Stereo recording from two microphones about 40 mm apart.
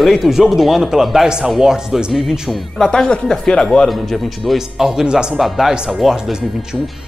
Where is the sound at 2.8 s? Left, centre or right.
Centre.